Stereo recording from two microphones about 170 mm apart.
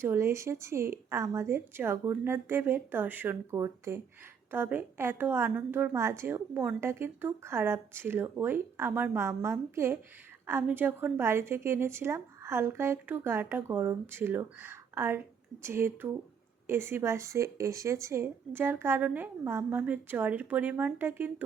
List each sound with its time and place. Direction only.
0.0 s a woman's voice: 15° right (ahead or behind)